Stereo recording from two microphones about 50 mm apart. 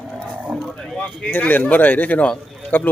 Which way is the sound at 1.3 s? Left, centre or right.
Left.